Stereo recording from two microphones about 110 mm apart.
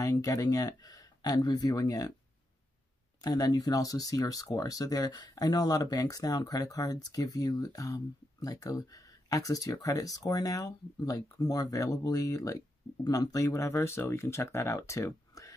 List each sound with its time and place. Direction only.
0.0 s speech: 30° left (ahead or behind)
3.2 s speech: 35° left (ahead or behind)